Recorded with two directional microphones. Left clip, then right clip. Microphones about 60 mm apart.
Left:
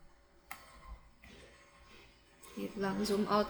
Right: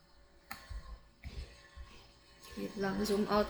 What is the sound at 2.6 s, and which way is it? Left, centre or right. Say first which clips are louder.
Speech: even; left.